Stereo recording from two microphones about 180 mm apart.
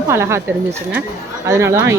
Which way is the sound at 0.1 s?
15° right (ahead or behind).